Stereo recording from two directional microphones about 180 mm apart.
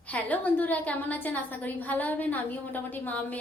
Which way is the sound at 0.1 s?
10° left (ahead or behind).